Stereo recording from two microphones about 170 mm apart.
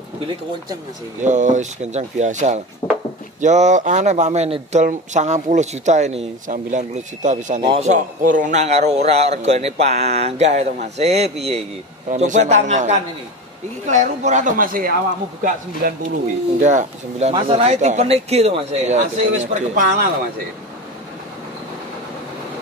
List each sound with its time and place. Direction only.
1.2 s speech: 45° right (ahead or behind)
2.8 s dishes: 25° left (ahead or behind)
3.3 s a man's voice: 45° right (ahead or behind)
16.6 s speech: 45° right (ahead or behind)
17.3 s a man's voice: 35° right (ahead or behind)